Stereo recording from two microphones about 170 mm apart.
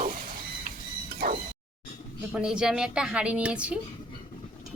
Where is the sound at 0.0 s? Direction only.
55° right (ahead or behind).